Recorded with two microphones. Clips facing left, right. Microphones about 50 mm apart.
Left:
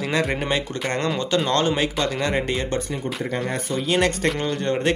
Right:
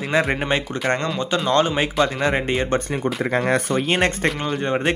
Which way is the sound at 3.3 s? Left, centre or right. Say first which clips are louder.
Right 8 dB; right.